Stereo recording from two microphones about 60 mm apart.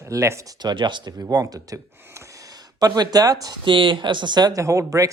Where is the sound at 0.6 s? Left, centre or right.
Right.